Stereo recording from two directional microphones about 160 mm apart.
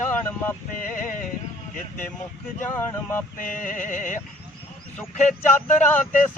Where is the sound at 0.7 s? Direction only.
55° left (ahead or behind).